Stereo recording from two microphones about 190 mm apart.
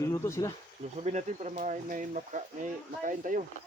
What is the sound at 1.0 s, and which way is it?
Speech, 40° right (ahead or behind).